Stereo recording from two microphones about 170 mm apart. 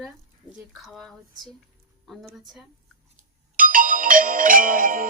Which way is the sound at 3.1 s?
55° right (ahead or behind).